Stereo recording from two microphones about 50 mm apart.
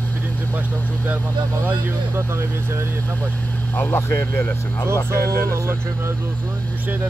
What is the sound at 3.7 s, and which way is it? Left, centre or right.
Speech, left.